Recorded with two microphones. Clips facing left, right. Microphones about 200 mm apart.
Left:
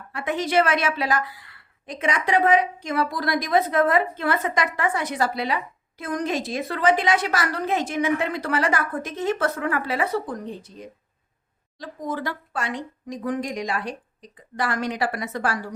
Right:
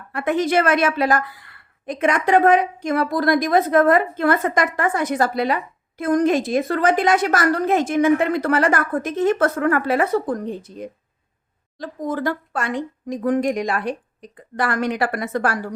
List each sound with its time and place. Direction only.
0.1 s a woman's voice: 55° right (ahead or behind)